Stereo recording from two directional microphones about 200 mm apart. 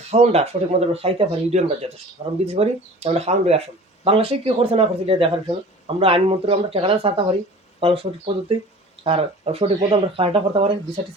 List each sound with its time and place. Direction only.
0.1 s speech: 30° right (ahead or behind)
9.0 s speech: 30° right (ahead or behind)